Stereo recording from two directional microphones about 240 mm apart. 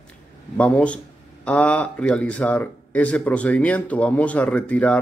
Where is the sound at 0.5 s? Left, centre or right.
Centre.